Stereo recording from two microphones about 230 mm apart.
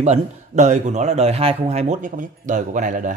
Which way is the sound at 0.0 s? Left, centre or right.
Right.